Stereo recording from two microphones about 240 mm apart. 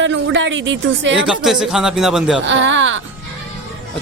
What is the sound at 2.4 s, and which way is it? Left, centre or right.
Speech, right.